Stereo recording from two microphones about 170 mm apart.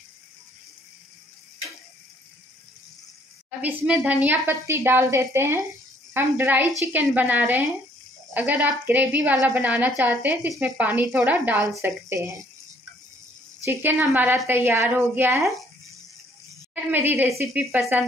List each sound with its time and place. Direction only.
3.4 s a woman's voice: 5° right (ahead or behind)
13.7 s a woman's voice: 10° right (ahead or behind)
16.7 s a woman's voice: 10° right (ahead or behind)